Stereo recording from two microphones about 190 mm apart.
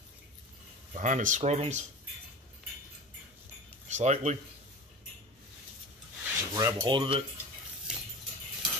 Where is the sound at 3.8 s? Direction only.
35° right (ahead or behind).